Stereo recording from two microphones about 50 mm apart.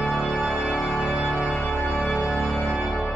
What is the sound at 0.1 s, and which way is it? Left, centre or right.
Organ, centre.